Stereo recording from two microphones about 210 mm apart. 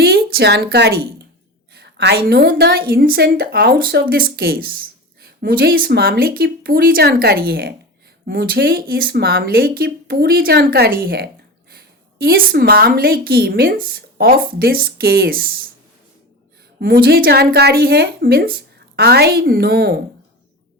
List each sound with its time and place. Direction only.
0.0 s a sound: 50° right (ahead or behind)
1.7 s a woman's voice: 50° right (ahead or behind)
16.8 s a woman's voice: 45° right (ahead or behind)